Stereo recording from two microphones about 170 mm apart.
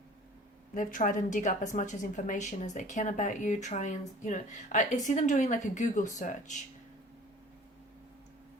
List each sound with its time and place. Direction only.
0.7 s a woman's voice: 50° left (ahead or behind)